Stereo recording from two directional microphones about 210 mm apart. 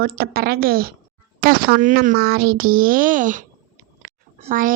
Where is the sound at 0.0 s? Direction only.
45° right (ahead or behind).